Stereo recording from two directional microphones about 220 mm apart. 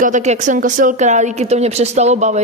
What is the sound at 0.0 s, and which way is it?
Speech, 35° right (ahead or behind).